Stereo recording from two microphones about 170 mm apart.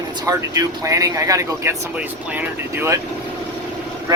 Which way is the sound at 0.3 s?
20° right (ahead or behind).